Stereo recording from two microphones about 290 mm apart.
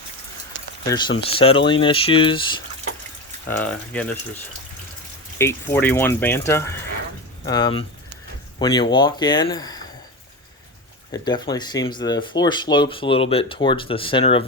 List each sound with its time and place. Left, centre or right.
0.9 s speech: centre
3.5 s speech: centre
5.4 s speech: centre
11.1 s speech: centre